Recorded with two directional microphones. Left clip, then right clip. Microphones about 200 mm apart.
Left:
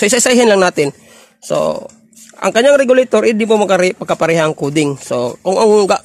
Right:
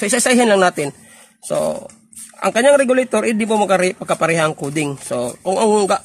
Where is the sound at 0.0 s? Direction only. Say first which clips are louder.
Left 5 dB; 40° left (ahead or behind).